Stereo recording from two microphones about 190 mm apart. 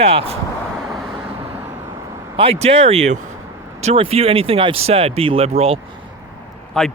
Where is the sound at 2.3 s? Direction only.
30° right (ahead or behind).